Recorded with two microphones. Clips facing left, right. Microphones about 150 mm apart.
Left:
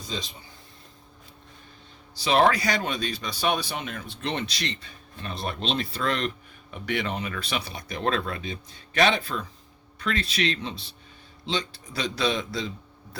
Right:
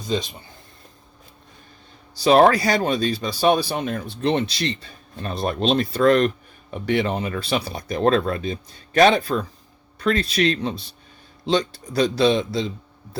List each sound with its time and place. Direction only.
2.2 s speech: 40° right (ahead or behind)